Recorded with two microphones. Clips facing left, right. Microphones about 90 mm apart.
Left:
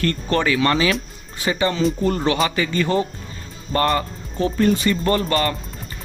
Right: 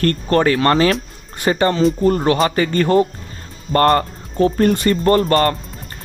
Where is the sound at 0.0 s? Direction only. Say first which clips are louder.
Right 5 dB; 45° right (ahead or behind).